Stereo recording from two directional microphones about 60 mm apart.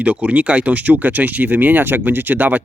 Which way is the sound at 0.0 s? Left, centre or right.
Right.